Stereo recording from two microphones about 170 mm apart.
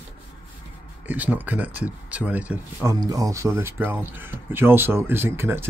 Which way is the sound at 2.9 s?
20° right (ahead or behind).